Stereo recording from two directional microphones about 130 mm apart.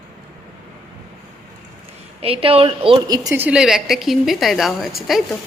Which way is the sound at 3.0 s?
30° right (ahead or behind).